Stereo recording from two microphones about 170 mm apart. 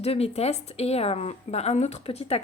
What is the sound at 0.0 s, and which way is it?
A woman's voice, 35° left (ahead or behind).